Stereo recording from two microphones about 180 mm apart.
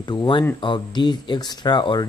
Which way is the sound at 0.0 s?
25° left (ahead or behind).